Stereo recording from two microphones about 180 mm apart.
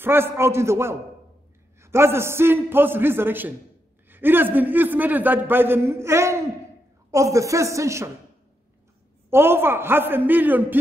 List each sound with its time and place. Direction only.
0.0 s a man's voice: 15° right (ahead or behind)
9.3 s a man's voice: 15° right (ahead or behind)